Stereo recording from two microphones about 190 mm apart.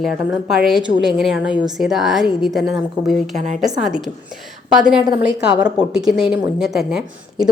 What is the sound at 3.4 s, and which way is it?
Speech, 40° right (ahead or behind).